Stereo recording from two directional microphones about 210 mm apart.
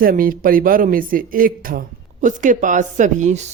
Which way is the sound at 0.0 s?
45° right (ahead or behind).